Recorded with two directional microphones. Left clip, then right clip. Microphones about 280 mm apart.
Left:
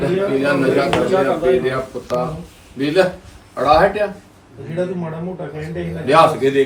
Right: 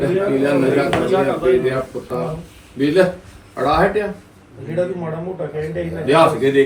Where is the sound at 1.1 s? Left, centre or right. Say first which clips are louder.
Even; left.